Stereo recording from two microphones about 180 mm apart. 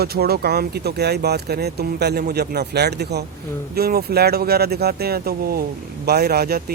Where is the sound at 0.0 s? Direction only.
60° right (ahead or behind).